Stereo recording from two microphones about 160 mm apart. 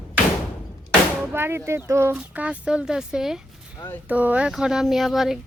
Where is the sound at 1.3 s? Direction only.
15° right (ahead or behind).